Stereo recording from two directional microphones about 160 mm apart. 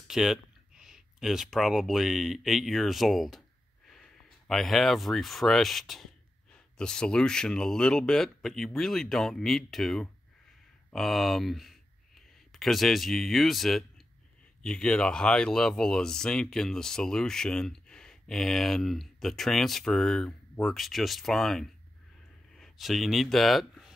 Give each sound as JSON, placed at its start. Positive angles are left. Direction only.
{"t": 0.1, "sound": "speech", "side_deg": -5}